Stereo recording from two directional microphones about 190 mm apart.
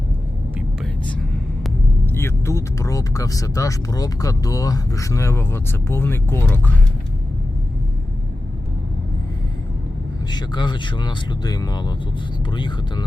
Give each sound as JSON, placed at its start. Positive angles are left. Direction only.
{"t": 2.0, "sound": "speech", "side_deg": 10}
{"t": 10.2, "sound": "speech", "side_deg": 20}